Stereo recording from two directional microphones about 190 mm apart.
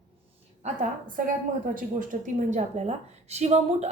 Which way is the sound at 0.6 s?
45° right (ahead or behind).